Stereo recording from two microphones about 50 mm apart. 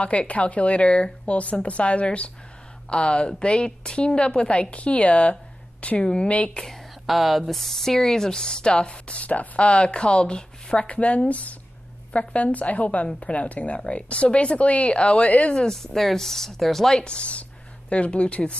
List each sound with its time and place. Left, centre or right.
0.0 s speech: left
6.6 s speech: centre; by 15.6 s left
15.6 s speech: centre
17.0 s speech: left